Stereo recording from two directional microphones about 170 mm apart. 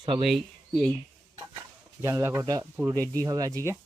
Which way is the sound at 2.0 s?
15° right (ahead or behind).